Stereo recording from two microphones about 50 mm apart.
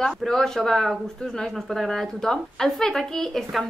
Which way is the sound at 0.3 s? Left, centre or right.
Centre.